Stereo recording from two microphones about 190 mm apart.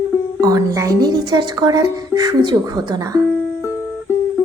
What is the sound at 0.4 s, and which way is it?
Speech, 20° right (ahead or behind).